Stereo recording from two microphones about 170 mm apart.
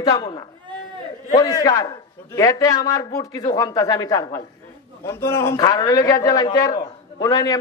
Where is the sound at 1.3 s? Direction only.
20° left (ahead or behind).